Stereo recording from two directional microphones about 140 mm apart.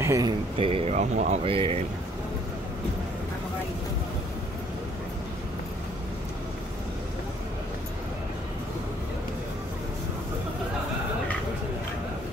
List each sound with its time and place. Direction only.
0.0 s speech: 20° right (ahead or behind)
0.6 s speech: 40° right (ahead or behind); by 1.4 s 60° right (ahead or behind)
1.4 s speech: 40° right (ahead or behind)